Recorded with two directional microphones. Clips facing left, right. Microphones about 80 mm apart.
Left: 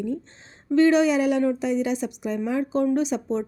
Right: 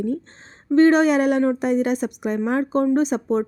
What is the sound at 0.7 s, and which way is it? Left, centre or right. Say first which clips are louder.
A woman's voice: right 3 dB; right.